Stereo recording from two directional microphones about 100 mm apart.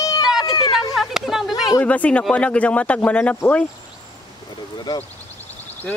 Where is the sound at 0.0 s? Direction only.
40° left (ahead or behind).